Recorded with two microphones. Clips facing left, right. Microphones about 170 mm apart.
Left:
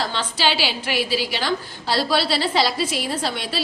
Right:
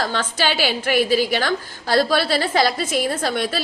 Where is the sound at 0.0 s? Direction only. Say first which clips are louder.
Right 1 dB; 50° right (ahead or behind).